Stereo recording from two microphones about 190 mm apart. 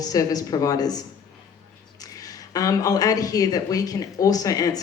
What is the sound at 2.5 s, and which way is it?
A woman's voice, 20° left (ahead or behind).